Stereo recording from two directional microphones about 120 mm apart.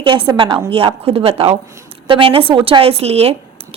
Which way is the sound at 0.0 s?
45° right (ahead or behind).